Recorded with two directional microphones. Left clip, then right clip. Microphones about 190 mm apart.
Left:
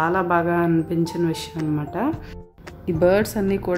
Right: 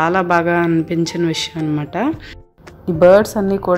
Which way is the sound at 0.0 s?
20° right (ahead or behind).